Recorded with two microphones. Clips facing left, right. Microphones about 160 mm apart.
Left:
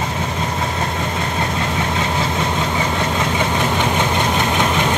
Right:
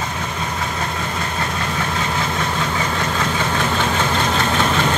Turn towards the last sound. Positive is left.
turn(degrees=15)  # may be behind; listen again after turning